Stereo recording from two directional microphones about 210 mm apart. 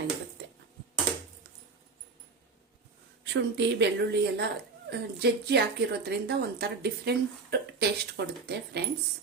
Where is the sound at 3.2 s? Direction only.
55° right (ahead or behind).